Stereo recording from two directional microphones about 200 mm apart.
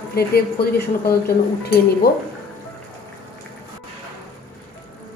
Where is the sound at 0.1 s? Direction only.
50° left (ahead or behind).